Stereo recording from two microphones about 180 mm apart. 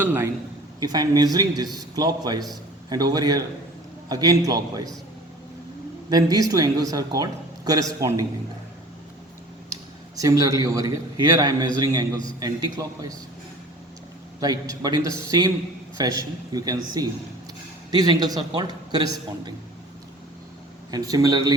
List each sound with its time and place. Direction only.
0.0 s a man's voice: 15° right (ahead or behind)
6.1 s a man's voice: 20° right (ahead or behind)
10.2 s a man's voice: 20° right (ahead or behind)
14.4 s a man's voice: 20° right (ahead or behind)
20.9 s a man's voice: 20° right (ahead or behind)